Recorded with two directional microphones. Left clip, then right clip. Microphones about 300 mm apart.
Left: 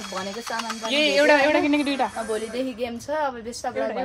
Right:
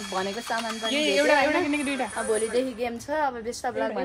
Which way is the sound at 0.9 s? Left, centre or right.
Left.